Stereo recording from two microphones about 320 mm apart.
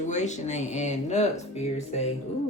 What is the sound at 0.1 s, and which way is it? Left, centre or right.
Speech, left.